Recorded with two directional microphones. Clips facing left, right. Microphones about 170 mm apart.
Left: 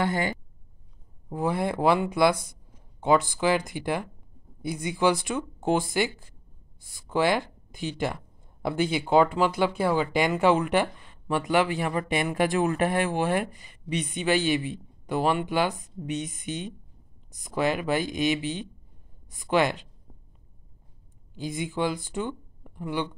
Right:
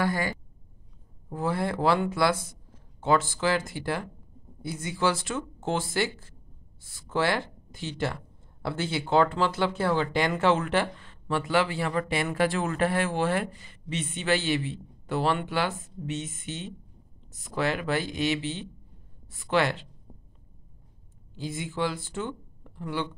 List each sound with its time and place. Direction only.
0.0 s a woman's voice: 25° left (ahead or behind)
21.4 s speech: 15° left (ahead or behind)